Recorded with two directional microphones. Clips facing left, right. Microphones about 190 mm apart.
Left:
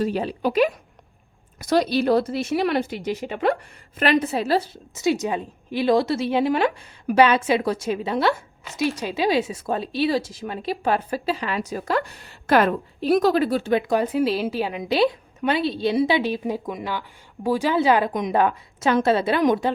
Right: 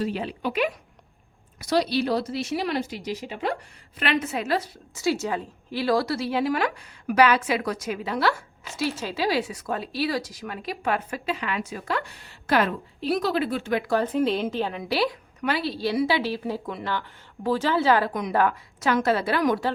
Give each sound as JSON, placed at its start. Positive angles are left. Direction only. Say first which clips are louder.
{"t": 0.0, "sound": "a woman's voice", "louder": "left 5 dB", "side_deg": 40}
{"t": 1.5, "sound": "speech", "louder": "left 3 dB", "side_deg": 50}
{"t": 3.9, "sound": "a woman's voice", "louder": "left 6 dB", "side_deg": 40}
{"t": 13.8, "sound": "a woman's voice", "louder": "left 2 dB", "side_deg": 10}